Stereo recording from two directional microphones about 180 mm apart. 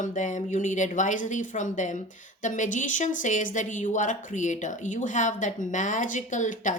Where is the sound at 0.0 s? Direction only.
45° left (ahead or behind).